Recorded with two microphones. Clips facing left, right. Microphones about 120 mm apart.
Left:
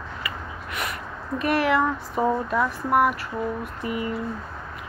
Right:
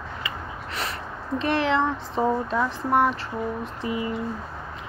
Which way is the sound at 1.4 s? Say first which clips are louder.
Left 1 dB; 25° right (ahead or behind).